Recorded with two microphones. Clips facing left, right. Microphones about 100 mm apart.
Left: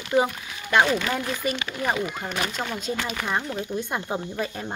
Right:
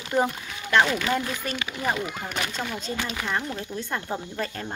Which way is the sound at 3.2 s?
15° left (ahead or behind).